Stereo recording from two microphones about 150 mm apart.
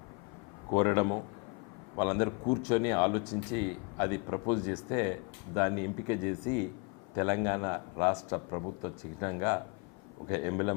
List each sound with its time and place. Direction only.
0.7 s speech: 20° left (ahead or behind)